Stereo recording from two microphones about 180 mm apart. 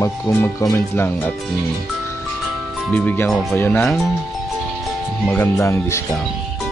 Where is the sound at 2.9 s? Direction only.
10° left (ahead or behind).